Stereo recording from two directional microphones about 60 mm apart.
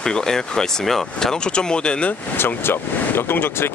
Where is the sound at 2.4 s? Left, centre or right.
Left.